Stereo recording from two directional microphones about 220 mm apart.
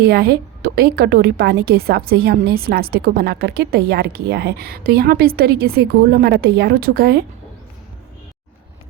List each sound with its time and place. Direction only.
0.0 s a woman's voice: 45° right (ahead or behind)